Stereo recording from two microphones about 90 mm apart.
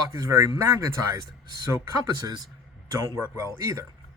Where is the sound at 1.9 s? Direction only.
45° right (ahead or behind).